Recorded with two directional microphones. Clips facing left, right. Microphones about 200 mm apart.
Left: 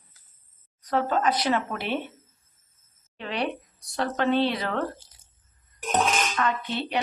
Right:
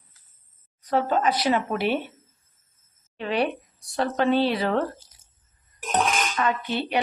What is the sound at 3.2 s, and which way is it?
A woman's voice, 10° right (ahead or behind).